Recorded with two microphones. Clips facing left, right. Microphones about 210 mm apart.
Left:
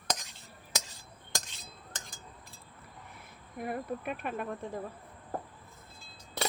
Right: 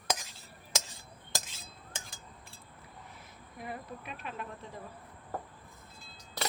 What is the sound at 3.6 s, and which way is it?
Speech, 55° left (ahead or behind).